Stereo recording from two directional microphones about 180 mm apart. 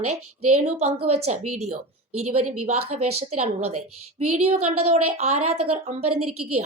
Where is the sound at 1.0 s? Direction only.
35° right (ahead or behind).